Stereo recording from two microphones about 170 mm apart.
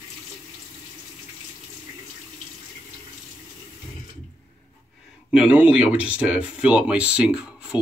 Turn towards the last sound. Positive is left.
turn(degrees=-5)  # may be behind; listen again after turning